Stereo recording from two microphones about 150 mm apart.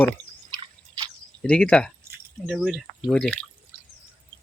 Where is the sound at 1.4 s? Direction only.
5° left (ahead or behind).